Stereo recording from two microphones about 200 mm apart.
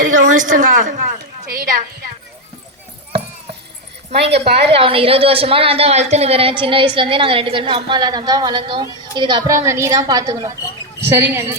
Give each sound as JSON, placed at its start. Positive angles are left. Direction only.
{"t": 0.3, "sound": "a woman's voice", "side_deg": -40}
{"t": 4.1, "sound": "speech", "side_deg": -55}
{"t": 4.7, "sound": "a woman's voice", "side_deg": -30}